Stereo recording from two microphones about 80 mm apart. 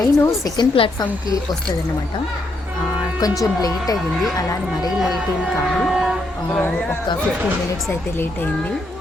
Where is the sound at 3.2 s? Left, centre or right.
Left.